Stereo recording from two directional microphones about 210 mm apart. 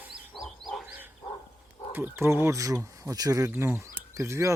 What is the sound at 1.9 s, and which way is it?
Speech, 10° right (ahead or behind).